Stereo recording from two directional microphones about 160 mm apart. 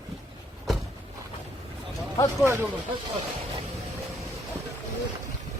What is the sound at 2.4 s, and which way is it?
Speech, 15° right (ahead or behind).